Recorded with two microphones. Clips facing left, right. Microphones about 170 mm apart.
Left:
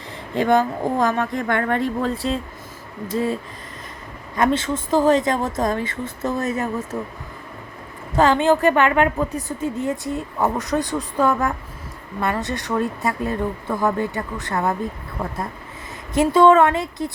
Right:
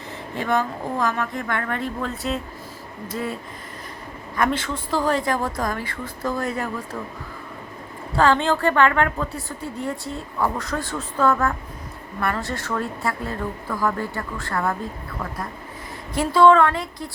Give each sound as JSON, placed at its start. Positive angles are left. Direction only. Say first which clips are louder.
{"t": 0.3, "sound": "a woman's voice", "louder": "left 6 dB", "side_deg": 40}
{"t": 4.4, "sound": "speech", "louder": "left 4 dB", "side_deg": 25}
{"t": 8.1, "sound": "a woman's voice", "louder": "left 3 dB", "side_deg": 15}